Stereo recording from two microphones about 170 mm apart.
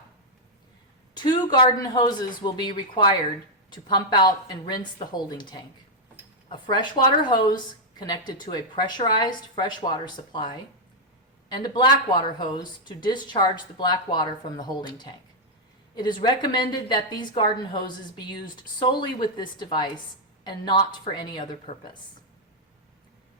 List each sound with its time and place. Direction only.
1.1 s a woman's voice: 25° left (ahead or behind)